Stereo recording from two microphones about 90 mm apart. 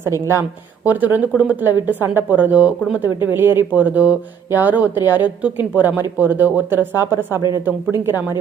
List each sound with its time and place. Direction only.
0.0 s speech: 30° right (ahead or behind)
0.9 s speech: 20° right (ahead or behind)
3.3 s speech: 25° right (ahead or behind)